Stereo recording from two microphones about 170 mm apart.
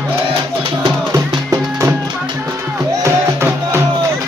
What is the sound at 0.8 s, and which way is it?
Music, 25° right (ahead or behind).